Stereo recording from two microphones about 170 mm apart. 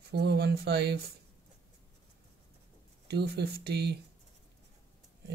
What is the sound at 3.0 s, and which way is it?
Speech, 75° right (ahead or behind).